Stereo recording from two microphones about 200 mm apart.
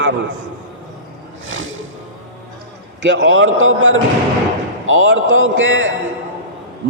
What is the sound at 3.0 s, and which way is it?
A man's voice, 65° right (ahead or behind).